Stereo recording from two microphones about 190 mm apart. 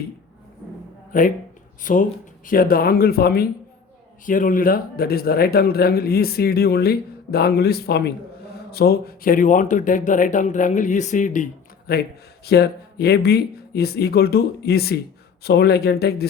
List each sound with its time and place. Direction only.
1.1 s a man's voice: 45° left (ahead or behind)
11.9 s a man's voice: 55° left (ahead or behind)